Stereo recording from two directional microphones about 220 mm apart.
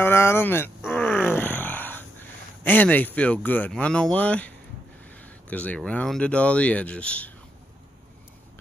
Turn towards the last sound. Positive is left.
turn(degrees=5)  # may be behind; listen again after turning